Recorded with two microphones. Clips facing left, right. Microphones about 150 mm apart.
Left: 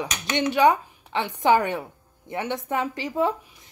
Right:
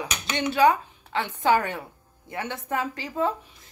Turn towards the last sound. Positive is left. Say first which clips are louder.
# left 2 dB
turn(degrees=20)  # may be behind; listen again after turning